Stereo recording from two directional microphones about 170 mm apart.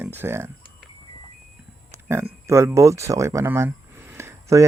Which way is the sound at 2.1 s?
15° right (ahead or behind).